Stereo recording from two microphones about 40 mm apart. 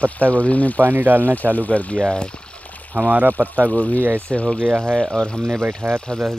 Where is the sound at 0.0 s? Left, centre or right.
Left.